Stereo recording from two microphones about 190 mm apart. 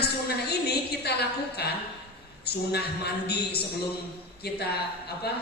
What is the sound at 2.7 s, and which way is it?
Speech, 60° left (ahead or behind).